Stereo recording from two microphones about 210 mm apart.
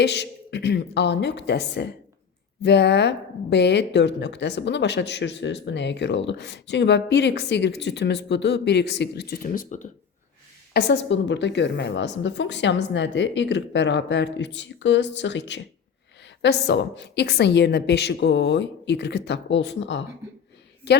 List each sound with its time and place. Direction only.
0.0 s a woman's voice: 55° left (ahead or behind); by 9.9 s 35° left (ahead or behind)
10.8 s a woman's voice: 55° left (ahead or behind)